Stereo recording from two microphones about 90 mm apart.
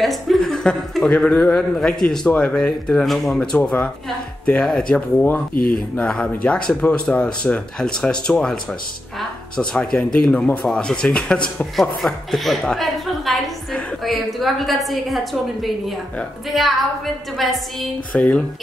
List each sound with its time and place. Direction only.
0.0 s a man's voice: centre (ahead or behind)
3.5 s a man's voice: 15° left (ahead or behind)
9.6 s a man's voice: 10° left (ahead or behind)